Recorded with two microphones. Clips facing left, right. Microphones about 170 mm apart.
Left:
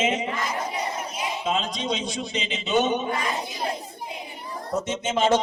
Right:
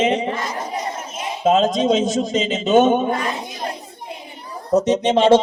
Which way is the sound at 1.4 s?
45° right (ahead or behind).